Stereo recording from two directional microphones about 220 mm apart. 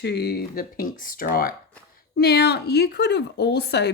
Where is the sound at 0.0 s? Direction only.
45° left (ahead or behind).